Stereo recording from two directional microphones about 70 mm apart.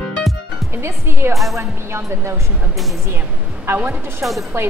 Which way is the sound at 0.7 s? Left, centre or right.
Right.